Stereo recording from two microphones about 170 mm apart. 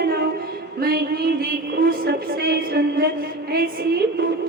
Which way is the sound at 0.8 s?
65° right (ahead or behind).